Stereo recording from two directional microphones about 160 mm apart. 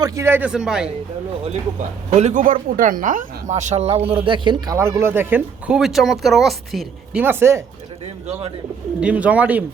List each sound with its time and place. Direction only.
0.0 s speech: 20° right (ahead or behind)
2.0 s speech: 45° right (ahead or behind)
4.0 s speech: 35° right (ahead or behind); by 7.2 s centre (ahead or behind)
7.2 s speech: 15° right (ahead or behind)
9.0 s speech: 10° right (ahead or behind)